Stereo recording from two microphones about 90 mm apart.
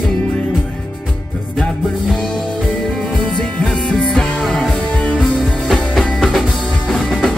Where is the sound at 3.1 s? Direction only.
5° left (ahead or behind).